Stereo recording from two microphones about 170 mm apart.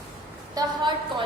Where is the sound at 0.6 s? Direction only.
25° right (ahead or behind).